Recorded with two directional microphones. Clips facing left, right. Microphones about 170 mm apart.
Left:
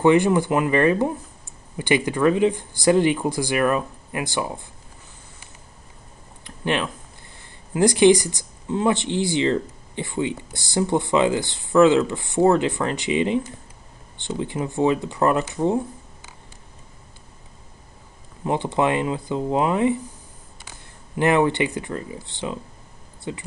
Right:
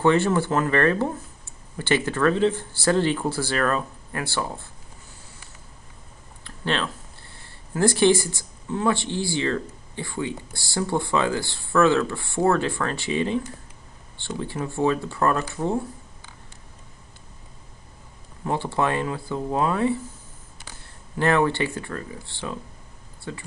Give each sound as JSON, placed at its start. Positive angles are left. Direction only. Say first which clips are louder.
{"t": 0.0, "sound": "speech", "louder": "left 3 dB", "side_deg": 15}
{"t": 6.4, "sound": "a sound", "louder": "left 2 dB", "side_deg": 15}
{"t": 7.7, "sound": "speech", "louder": "left 4 dB", "side_deg": 15}
{"t": 18.4, "sound": "speech", "louder": "left 3 dB", "side_deg": 20}
{"t": 21.2, "sound": "speech", "louder": "left 2 dB", "side_deg": 15}